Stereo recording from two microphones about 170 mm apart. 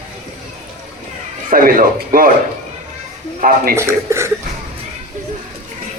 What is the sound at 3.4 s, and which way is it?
Speech, 55° right (ahead or behind).